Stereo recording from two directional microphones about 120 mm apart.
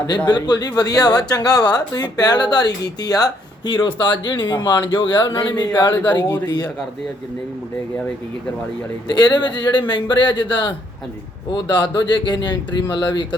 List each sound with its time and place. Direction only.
0.3 s speech: 35° left (ahead or behind)
9.1 s speech: 35° left (ahead or behind)